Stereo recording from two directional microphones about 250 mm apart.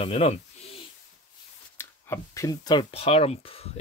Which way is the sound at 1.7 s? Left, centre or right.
Centre.